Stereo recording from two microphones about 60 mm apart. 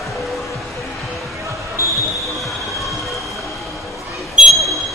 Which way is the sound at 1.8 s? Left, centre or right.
Left.